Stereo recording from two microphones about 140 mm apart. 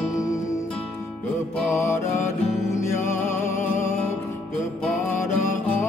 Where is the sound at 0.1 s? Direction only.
25° left (ahead or behind).